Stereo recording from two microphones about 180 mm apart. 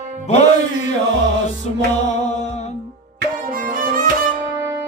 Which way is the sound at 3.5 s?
50° right (ahead or behind).